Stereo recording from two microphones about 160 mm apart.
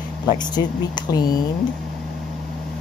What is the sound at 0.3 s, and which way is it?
Speech, 25° left (ahead or behind).